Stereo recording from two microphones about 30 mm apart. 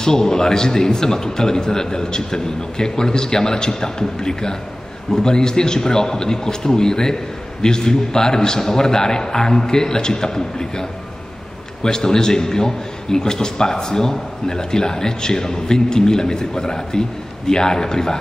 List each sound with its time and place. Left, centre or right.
0.0 s a man's voice: centre